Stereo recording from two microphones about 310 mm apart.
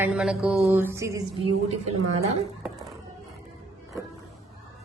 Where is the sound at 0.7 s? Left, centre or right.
Centre.